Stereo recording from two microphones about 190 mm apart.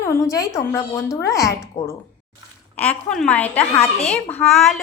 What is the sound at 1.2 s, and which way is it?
Speech, 15° left (ahead or behind).